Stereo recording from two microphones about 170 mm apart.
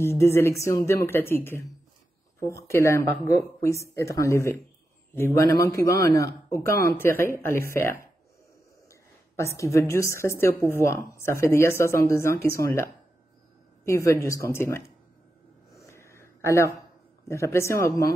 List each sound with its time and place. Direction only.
0.0 s a woman's voice: 15° left (ahead or behind)
9.4 s a woman's voice: 15° left (ahead or behind)
13.8 s a woman's voice: 15° left (ahead or behind)
15.7 s a sound: 15° left (ahead or behind)
17.3 s a woman's voice: 15° left (ahead or behind)